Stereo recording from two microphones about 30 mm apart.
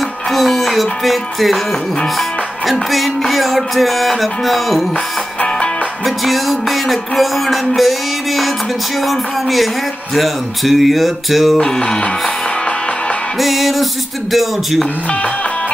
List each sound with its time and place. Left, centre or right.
0.3 s music: centre
6.0 s music: centre
11.5 s music: left
13.4 s music: centre